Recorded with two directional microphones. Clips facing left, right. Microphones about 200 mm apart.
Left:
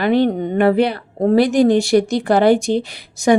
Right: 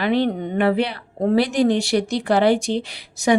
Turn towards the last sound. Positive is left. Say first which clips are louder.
# left 4 dB
turn(degrees=50)  # may be behind; listen again after turning